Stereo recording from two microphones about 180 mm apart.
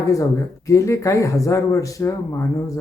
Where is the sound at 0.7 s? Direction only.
15° left (ahead or behind).